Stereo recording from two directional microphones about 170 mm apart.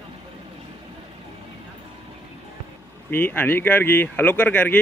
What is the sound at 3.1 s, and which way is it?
Speech, 10° left (ahead or behind).